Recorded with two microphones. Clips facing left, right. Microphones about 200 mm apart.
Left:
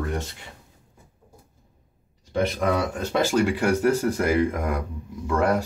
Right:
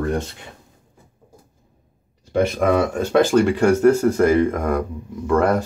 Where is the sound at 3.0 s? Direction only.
55° right (ahead or behind).